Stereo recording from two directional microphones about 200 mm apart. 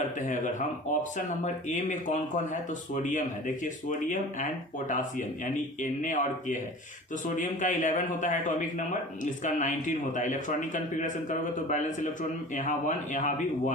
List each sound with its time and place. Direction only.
0.2 s speech: 40° left (ahead or behind)
1.7 s speech: 40° left (ahead or behind)
13.1 s speech: 40° left (ahead or behind)